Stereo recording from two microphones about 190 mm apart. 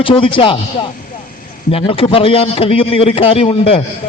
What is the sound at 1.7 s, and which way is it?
A man's voice, 30° left (ahead or behind).